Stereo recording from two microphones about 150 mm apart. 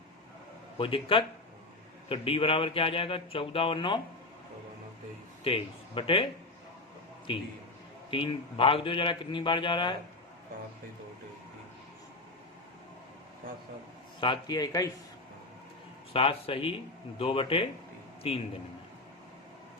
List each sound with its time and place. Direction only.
0.8 s speech: 35° left (ahead or behind)
5.4 s speech: 40° left (ahead or behind)
7.3 s speech: 35° left (ahead or behind)
14.2 s a man's voice: 30° left (ahead or behind)
16.1 s a man's voice: 40° left (ahead or behind)